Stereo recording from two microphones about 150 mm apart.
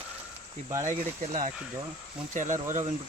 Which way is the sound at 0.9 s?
55° right (ahead or behind).